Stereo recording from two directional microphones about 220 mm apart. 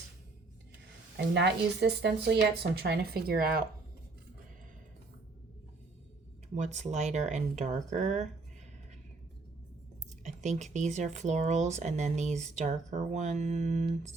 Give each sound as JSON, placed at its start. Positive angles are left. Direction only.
{"t": 1.1, "sound": "speech", "side_deg": -50}
{"t": 6.5, "sound": "speech", "side_deg": -30}
{"t": 10.2, "sound": "speech", "side_deg": -30}